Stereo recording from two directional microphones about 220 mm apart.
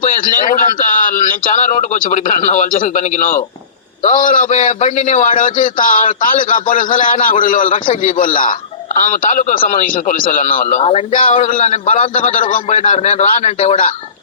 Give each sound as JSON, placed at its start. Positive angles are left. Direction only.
{"t": 0.0, "sound": "a man's voice", "side_deg": 35}